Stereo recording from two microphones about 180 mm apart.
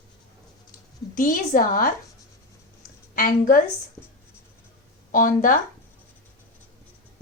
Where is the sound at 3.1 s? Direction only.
50° left (ahead or behind).